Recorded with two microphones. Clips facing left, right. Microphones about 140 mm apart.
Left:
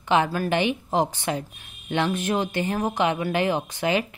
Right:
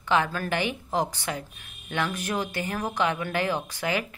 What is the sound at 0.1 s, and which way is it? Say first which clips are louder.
Speech: left 4 dB; 15° left (ahead or behind).